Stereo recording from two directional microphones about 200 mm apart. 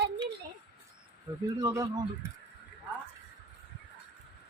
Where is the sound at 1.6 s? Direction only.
15° right (ahead or behind).